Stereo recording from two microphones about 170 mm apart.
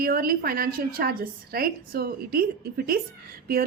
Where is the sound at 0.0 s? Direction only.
60° right (ahead or behind).